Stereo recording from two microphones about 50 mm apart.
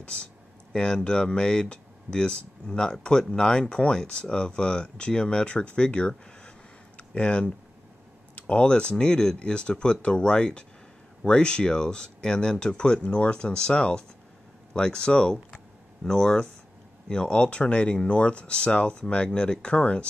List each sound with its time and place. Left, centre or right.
0.0 s speech: left
15.3 s a sound: centre
17.1 s speech: centre